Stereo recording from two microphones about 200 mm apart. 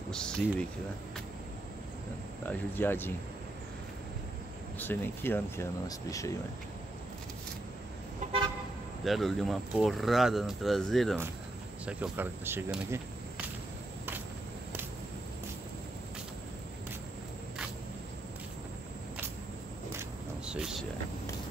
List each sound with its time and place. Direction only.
0.1 s speech: 5° left (ahead or behind)
2.4 s speech: 10° left (ahead or behind)
4.7 s speech: 10° left (ahead or behind)
8.2 s car: 40° right (ahead or behind)
9.0 s speech: centre (ahead or behind)
19.9 s single-lens reflex camera: 10° right (ahead or behind)